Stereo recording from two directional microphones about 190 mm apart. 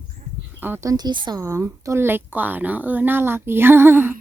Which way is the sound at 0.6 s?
15° right (ahead or behind).